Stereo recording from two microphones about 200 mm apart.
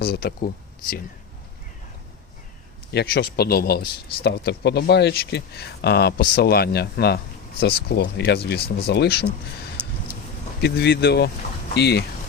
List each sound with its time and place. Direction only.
0.0 s speech: 50° left (ahead or behind)
2.9 s speech: 55° left (ahead or behind)
10.6 s speech: 55° left (ahead or behind)